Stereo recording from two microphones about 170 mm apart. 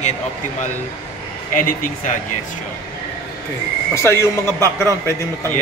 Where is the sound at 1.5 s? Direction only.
55° left (ahead or behind).